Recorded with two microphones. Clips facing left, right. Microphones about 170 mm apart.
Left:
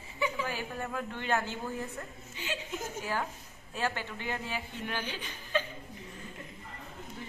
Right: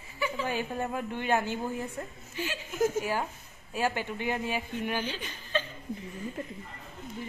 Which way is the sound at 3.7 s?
15° right (ahead or behind).